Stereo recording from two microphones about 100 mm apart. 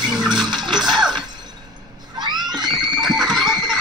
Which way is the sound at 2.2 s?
45° right (ahead or behind).